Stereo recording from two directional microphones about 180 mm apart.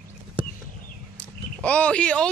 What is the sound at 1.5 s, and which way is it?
Speech, 5° left (ahead or behind).